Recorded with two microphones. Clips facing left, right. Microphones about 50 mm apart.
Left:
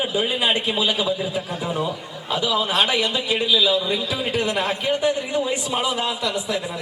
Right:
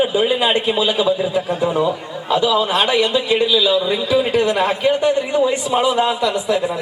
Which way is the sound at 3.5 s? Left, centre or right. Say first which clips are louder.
Right 4 dB; right.